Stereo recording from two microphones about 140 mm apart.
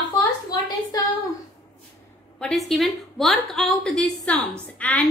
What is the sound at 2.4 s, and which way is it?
A woman's voice, centre (ahead or behind).